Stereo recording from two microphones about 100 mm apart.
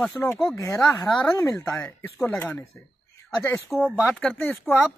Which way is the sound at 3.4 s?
30° left (ahead or behind).